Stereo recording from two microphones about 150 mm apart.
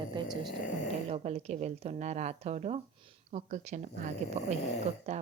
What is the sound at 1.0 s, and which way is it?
Speech, 45° right (ahead or behind).